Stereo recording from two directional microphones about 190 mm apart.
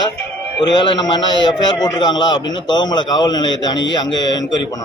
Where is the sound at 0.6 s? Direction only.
25° left (ahead or behind).